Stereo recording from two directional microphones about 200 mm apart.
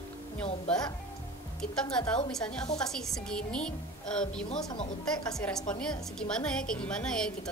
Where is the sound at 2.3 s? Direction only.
5° left (ahead or behind).